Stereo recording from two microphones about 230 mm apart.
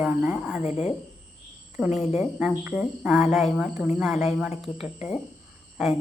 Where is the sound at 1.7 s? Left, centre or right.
Centre.